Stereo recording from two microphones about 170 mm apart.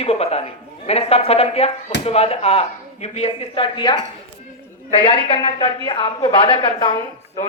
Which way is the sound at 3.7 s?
25° left (ahead or behind).